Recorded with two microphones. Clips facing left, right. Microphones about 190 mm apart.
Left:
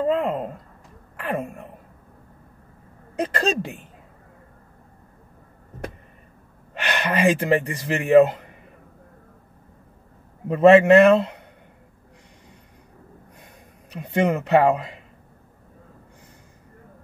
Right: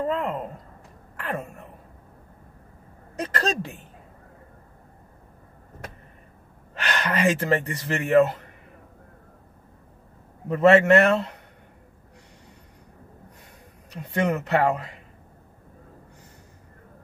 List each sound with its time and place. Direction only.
0.0 s a sound: 20° left (ahead or behind)
3.2 s speech: 15° left (ahead or behind)
6.7 s speech: 20° left (ahead or behind)
10.5 s speech: 20° left (ahead or behind)
13.8 s speech: 20° left (ahead or behind)